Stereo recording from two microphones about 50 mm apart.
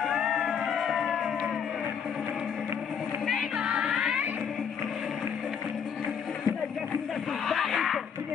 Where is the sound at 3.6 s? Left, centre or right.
Centre.